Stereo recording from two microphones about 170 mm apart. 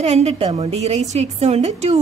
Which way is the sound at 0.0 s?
40° right (ahead or behind).